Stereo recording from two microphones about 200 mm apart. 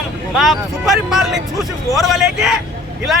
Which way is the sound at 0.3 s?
Centre (ahead or behind).